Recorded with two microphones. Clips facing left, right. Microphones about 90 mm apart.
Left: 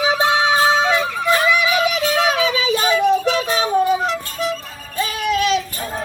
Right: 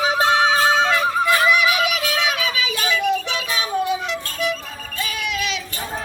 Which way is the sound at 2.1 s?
30° left (ahead or behind).